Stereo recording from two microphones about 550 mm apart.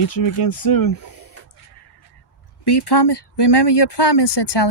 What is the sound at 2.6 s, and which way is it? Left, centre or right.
Speech, left.